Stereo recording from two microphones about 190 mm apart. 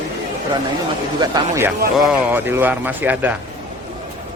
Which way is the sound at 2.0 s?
5° right (ahead or behind).